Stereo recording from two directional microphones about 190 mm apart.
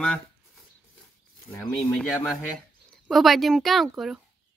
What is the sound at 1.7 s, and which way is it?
Speech, centre (ahead or behind).